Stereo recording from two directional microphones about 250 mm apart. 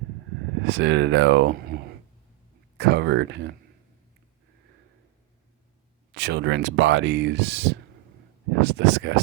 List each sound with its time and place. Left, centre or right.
0.6 s speech: right
6.1 s speech: right